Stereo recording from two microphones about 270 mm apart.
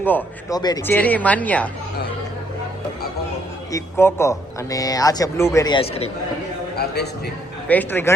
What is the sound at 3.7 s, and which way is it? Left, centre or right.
Speech, centre.